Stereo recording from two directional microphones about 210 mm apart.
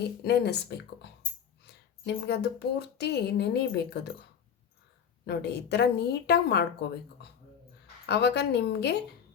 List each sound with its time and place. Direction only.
0.2 s speech: 50° left (ahead or behind)
5.2 s speech: 50° left (ahead or behind)